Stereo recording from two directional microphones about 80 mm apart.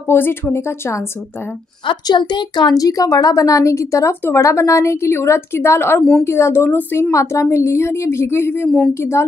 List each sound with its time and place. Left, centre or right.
0.1 s a woman's voice: left
1.9 s a woman's voice: left
2.8 s a woman's voice: left
7.1 s a woman's voice: left